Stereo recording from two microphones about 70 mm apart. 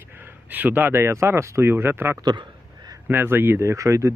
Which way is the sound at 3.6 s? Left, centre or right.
Right.